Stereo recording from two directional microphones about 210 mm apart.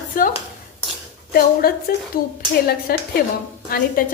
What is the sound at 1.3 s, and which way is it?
Dishes, 45° left (ahead or behind).